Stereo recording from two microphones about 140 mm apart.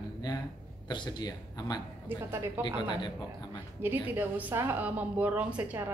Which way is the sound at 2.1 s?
15° right (ahead or behind).